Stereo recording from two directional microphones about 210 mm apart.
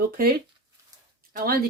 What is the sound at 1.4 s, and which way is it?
Speech, 45° right (ahead or behind).